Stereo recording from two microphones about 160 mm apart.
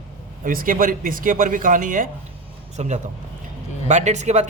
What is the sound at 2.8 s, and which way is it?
Speech, 45° right (ahead or behind).